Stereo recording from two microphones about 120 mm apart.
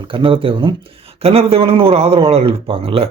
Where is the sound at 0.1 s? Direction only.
45° right (ahead or behind).